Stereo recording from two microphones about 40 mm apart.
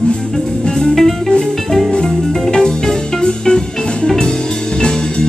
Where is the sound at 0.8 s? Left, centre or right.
Centre.